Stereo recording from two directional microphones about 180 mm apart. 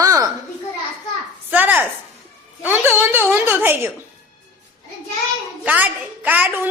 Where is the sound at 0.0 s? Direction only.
20° right (ahead or behind).